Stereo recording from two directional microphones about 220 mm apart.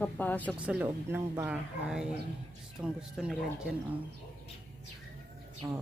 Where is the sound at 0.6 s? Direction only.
5° right (ahead or behind).